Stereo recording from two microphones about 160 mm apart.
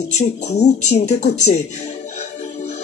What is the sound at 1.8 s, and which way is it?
Music, 45° left (ahead or behind).